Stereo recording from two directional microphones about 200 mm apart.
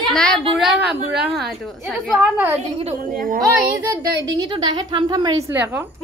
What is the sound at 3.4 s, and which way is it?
A woman's voice, 15° right (ahead or behind).